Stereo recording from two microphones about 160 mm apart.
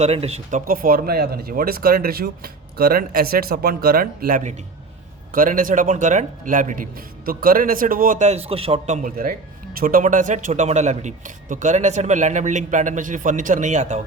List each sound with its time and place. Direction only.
0.0 s speech: 40° right (ahead or behind)
0.7 s a man's voice: 65° right (ahead or behind); by 14.0 s 45° right (ahead or behind)